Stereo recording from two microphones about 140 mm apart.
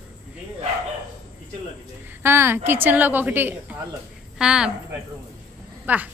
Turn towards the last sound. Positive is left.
turn(degrees=-10)  # may be behind; listen again after turning